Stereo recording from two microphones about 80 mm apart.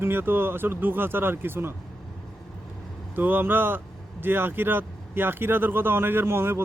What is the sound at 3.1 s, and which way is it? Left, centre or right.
Speech, right.